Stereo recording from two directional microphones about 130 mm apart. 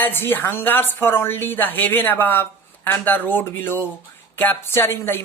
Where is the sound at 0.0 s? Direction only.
15° left (ahead or behind).